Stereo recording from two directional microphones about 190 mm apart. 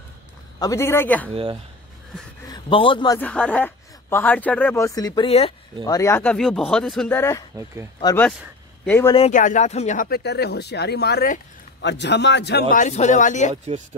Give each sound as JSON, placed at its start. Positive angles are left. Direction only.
{"t": 0.6, "sound": "speech", "side_deg": 15}
{"t": 1.3, "sound": "speech", "side_deg": -30}
{"t": 2.4, "sound": "a man's voice", "side_deg": 25}
{"t": 3.2, "sound": "speech", "side_deg": 5}
{"t": 5.9, "sound": "speech", "side_deg": 15}
{"t": 7.5, "sound": "speech", "side_deg": -15}
{"t": 8.8, "sound": "a man's voice", "side_deg": 10}
{"t": 9.3, "sound": "speech", "side_deg": 40}